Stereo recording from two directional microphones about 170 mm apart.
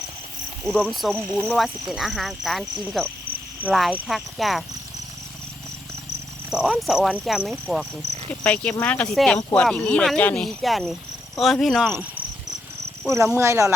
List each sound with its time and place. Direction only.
0.6 s speech: centre (ahead or behind)
6.6 s speech: centre (ahead or behind)
13.1 s speech: 15° right (ahead or behind)